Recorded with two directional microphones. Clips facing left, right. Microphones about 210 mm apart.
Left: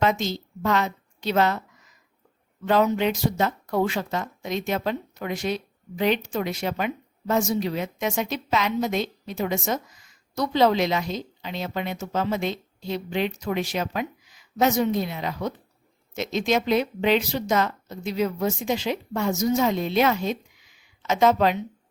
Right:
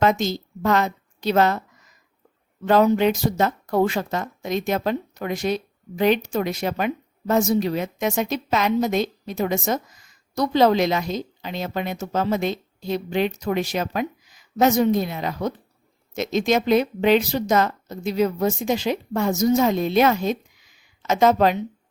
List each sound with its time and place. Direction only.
0.0 s a woman's voice: 45° right (ahead or behind)
2.6 s speech: 45° right (ahead or behind)